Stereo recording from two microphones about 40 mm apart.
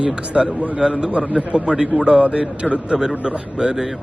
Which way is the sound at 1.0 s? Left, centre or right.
Right.